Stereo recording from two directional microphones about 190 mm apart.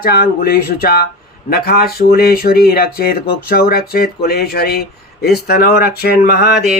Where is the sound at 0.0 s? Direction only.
55° left (ahead or behind).